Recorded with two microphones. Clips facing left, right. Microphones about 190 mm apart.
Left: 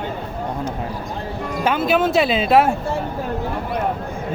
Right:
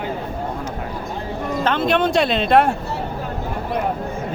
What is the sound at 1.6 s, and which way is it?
Speech, 10° left (ahead or behind).